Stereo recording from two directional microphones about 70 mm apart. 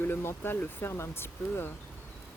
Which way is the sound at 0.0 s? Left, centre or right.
Left.